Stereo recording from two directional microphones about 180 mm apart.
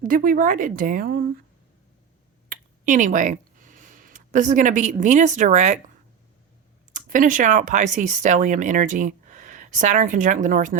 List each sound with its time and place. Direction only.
0.0 s speech: 50° right (ahead or behind)
2.8 s speech: 45° right (ahead or behind)
6.9 s speech: 45° right (ahead or behind)